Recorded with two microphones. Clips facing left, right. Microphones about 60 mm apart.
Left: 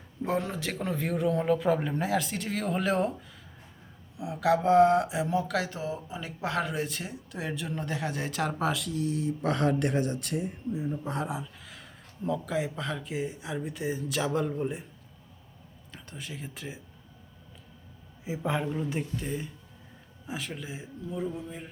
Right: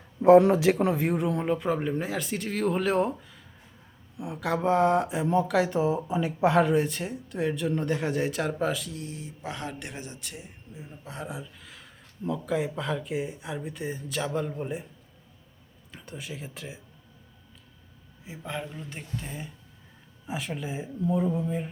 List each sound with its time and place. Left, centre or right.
0.3 s speech: centre
10.8 s speech: centre
15.9 s speech: centre
18.3 s a man's voice: centre
18.9 s speech: centre